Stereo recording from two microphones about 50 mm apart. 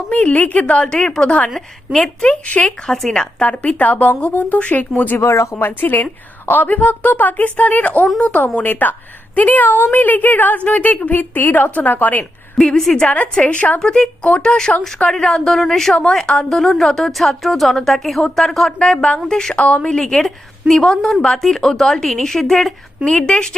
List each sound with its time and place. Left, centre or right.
0.1 s a woman's voice: left
2.2 s a woman's voice: left
2.6 s a woman's voice: centre
3.4 s a woman's voice: left
5.2 s speech: left
5.5 s a woman's voice: left
12.5 s a woman's voice: centre
13.3 s a woman's voice: left
13.7 s a woman's voice: centre
16.0 s a woman's voice: centre
19.5 s a woman's voice: left; by 22.7 s centre
23.0 s a woman's voice: centre